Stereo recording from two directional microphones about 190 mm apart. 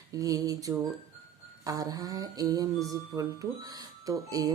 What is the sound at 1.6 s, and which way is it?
Speech, 20° right (ahead or behind).